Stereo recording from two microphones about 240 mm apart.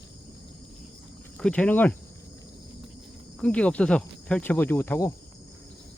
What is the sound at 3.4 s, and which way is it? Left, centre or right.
Speech, centre.